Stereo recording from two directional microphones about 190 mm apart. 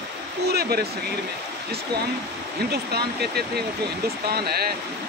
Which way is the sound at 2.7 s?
55° right (ahead or behind).